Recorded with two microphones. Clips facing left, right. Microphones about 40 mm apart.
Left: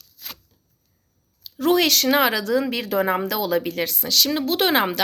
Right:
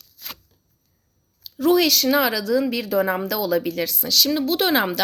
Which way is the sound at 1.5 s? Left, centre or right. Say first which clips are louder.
Right 1 dB; left.